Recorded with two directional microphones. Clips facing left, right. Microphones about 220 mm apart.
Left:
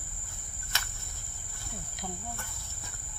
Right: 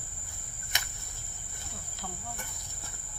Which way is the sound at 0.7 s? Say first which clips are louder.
Even; 15° right (ahead or behind).